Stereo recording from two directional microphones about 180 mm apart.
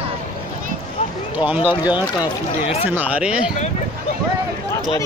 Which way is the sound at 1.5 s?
10° right (ahead or behind).